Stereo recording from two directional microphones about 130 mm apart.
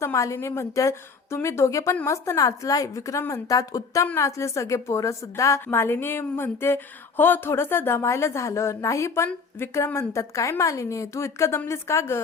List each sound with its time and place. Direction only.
0.0 s a woman's voice: 20° left (ahead or behind)